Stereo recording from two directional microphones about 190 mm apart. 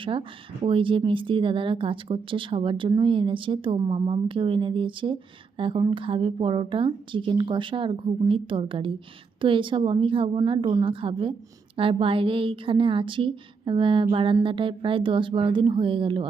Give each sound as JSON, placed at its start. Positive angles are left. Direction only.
{"t": 0.0, "sound": "speech", "side_deg": -25}